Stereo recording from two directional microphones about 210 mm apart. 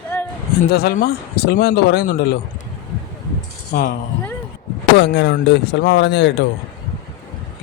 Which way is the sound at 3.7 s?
45° left (ahead or behind).